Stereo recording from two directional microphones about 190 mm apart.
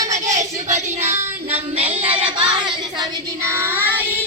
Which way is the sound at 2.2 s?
25° right (ahead or behind).